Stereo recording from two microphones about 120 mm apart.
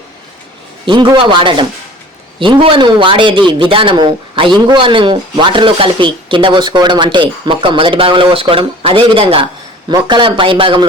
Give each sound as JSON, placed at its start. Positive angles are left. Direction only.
{"t": 0.9, "sound": "a man's voice", "side_deg": -45}